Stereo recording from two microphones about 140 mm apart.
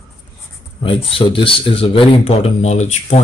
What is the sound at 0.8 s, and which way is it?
Speech, 40° left (ahead or behind).